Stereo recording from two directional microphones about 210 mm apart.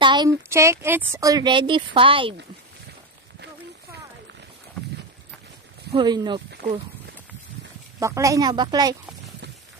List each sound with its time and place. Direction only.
0.0 s a woman's voice: 20° right (ahead or behind)
5.9 s speech: 20° right (ahead or behind)
8.0 s a woman's voice: 15° right (ahead or behind)